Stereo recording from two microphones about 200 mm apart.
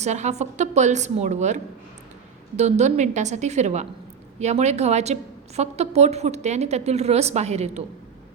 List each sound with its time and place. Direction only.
0.0 s a woman's voice: 35° right (ahead or behind)